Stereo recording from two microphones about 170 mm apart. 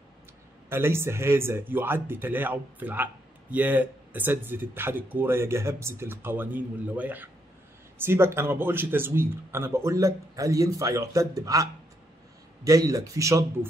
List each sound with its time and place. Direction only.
0.7 s speech: 15° right (ahead or behind)